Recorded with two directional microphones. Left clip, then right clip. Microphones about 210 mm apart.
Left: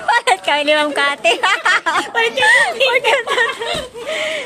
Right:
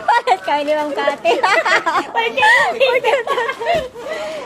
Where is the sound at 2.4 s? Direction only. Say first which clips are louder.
Right 1 dB; 5° right (ahead or behind).